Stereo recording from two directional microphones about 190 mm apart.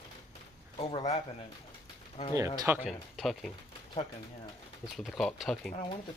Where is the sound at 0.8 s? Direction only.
30° left (ahead or behind).